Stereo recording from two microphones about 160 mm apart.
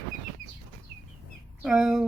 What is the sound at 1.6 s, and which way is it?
Speech, 5° right (ahead or behind).